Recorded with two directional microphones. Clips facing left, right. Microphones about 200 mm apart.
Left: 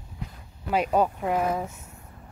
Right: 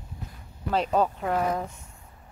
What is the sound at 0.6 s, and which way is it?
Speech, 10° left (ahead or behind).